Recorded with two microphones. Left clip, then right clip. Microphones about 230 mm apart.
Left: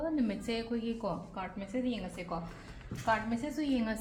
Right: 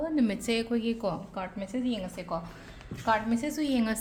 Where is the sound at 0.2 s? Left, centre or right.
Right.